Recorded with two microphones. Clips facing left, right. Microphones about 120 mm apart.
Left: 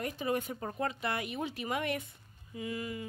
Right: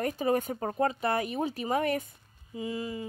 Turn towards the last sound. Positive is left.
turn(degrees=-25)  # may be behind; listen again after turning